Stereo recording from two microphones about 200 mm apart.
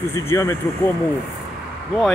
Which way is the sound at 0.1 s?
15° left (ahead or behind).